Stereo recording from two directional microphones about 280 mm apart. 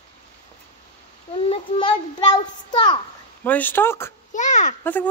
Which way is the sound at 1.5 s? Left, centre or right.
Centre.